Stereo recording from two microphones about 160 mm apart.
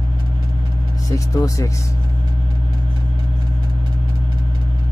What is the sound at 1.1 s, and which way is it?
Speech, 20° left (ahead or behind).